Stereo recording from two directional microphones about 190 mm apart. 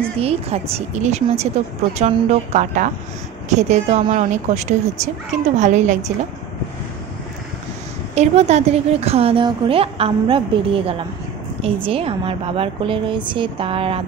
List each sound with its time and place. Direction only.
0.2 s a woman's voice: 30° right (ahead or behind)
8.1 s a woman's voice: 35° right (ahead or behind)